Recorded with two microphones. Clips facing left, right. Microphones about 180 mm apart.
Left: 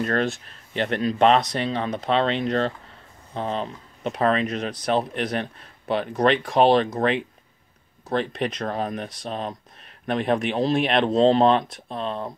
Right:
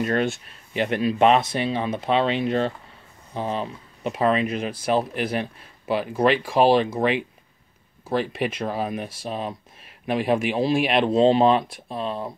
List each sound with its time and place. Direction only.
0.0 s speech: 5° right (ahead or behind)